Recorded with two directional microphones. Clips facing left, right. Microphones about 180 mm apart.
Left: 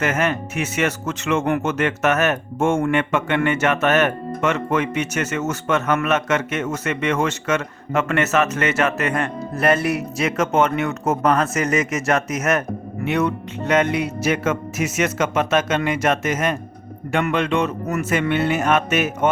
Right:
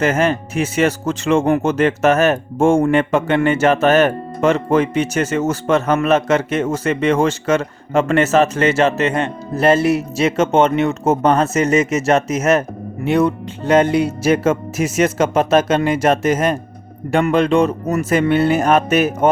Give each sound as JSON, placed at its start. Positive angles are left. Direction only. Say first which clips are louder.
{"t": 0.0, "sound": "speech", "louder": "right 5 dB", "side_deg": -30}